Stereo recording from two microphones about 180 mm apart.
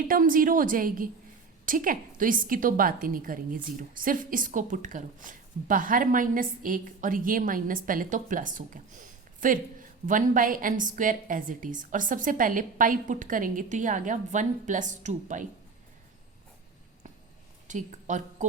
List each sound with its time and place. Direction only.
0.1 s a woman's voice: 50° right (ahead or behind)
17.7 s a woman's voice: 40° right (ahead or behind)